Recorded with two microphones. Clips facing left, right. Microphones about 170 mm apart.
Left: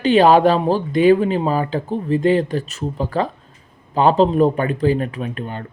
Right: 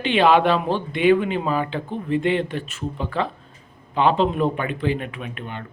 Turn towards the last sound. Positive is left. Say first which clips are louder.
# left 6 dB
turn(degrees=40)  # may be behind; listen again after turning